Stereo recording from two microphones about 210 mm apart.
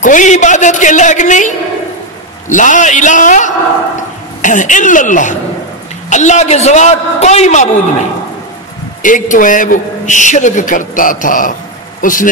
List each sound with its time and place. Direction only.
0.0 s a man's voice: 35° left (ahead or behind)
2.5 s a man's voice: 35° left (ahead or behind)
9.0 s a man's voice: 40° left (ahead or behind)